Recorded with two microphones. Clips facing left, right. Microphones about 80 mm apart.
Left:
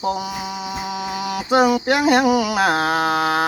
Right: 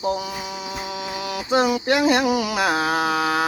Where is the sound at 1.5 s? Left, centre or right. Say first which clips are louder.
Left 3 dB; left.